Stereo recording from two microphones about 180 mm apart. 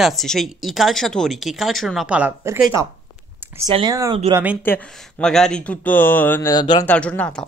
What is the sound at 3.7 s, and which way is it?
Speech, 20° right (ahead or behind).